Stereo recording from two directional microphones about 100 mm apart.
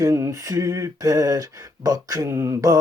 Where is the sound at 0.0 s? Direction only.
30° right (ahead or behind).